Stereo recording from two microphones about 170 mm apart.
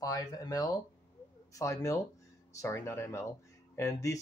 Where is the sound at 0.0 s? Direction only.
20° left (ahead or behind).